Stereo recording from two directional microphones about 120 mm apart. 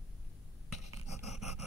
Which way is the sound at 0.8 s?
65° left (ahead or behind).